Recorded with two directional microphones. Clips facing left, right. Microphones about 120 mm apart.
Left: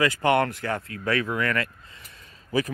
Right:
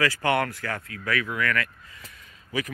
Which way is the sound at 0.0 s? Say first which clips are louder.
Left 3 dB; 20° left (ahead or behind).